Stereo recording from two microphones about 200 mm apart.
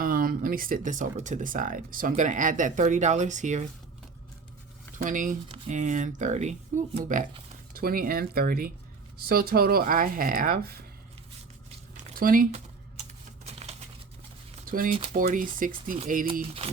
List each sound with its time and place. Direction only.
0.0 s speech: 45° right (ahead or behind)
5.0 s speech: 40° right (ahead or behind)
7.7 s speech: 50° right (ahead or behind)
12.1 s speech: 45° right (ahead or behind)
13.1 s typing: 30° right (ahead or behind)
14.7 s speech: 45° right (ahead or behind)